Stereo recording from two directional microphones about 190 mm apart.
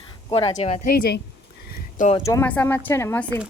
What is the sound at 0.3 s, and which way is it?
Speech, 30° left (ahead or behind).